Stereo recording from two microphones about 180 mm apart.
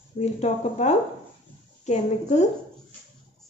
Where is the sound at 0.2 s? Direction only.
40° left (ahead or behind).